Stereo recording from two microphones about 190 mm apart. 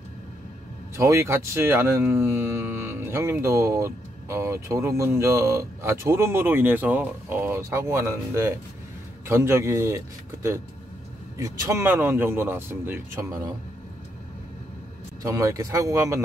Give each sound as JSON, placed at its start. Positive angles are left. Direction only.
{"t": 0.9, "sound": "speech", "side_deg": -15}
{"t": 15.2, "sound": "speech", "side_deg": -15}